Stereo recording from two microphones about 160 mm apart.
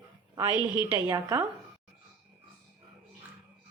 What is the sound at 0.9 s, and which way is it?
Speech, 20° right (ahead or behind).